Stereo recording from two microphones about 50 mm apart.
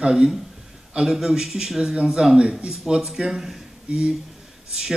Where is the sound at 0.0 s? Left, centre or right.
Centre.